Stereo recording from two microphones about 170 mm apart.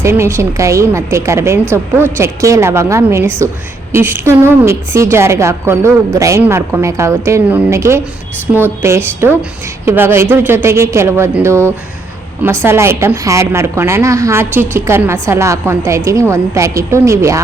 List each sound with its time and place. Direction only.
0.0 s a woman's voice: 15° right (ahead or behind)